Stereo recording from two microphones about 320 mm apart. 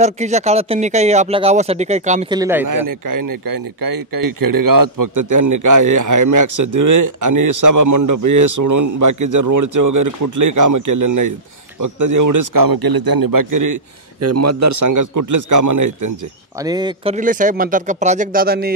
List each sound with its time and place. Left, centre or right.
0.0 s speech: right
2.7 s a man's voice: right
14.2 s a man's voice: right
16.6 s speech: centre; by 18.8 s right